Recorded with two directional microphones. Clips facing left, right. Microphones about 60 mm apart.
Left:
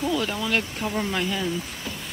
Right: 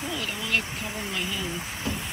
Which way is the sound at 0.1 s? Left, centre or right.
Centre.